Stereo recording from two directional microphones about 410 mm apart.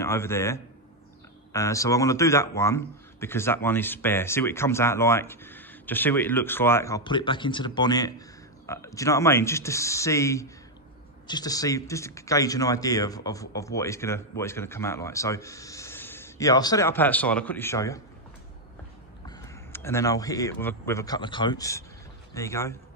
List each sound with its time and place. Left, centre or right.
0.0 s speech: centre
19.2 s speech: centre